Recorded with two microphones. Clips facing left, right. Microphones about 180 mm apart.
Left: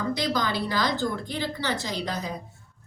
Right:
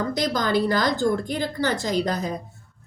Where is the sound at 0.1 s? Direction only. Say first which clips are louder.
Right 3 dB; 45° right (ahead or behind).